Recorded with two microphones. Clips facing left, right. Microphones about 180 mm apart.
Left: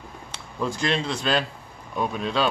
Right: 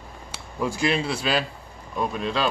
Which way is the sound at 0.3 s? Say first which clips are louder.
Right 1 dB; 10° right (ahead or behind).